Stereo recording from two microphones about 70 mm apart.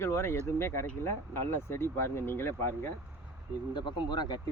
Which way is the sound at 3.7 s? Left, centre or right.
Left.